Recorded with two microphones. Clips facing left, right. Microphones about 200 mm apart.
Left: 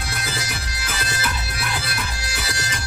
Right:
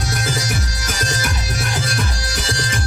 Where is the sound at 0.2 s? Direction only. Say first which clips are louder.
Right 7 dB; 45° right (ahead or behind).